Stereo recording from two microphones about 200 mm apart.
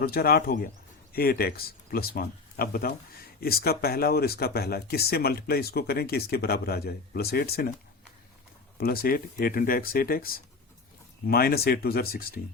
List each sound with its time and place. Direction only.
0.0 s speech: 50° left (ahead or behind)
8.8 s speech: 50° left (ahead or behind)